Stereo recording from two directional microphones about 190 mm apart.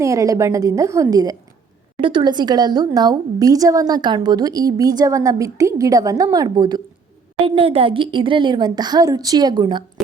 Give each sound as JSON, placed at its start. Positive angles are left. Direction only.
{"t": 0.0, "sound": "a woman's voice", "side_deg": -15}